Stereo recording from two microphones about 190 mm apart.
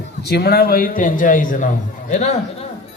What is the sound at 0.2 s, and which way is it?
A man's voice, 60° left (ahead or behind).